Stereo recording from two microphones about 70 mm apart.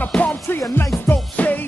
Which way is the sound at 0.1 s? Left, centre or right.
Left.